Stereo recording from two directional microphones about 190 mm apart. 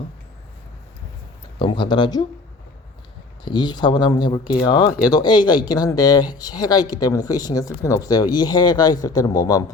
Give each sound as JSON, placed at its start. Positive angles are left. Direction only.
{"t": 1.5, "sound": "speech", "side_deg": 25}
{"t": 3.4, "sound": "speech", "side_deg": 25}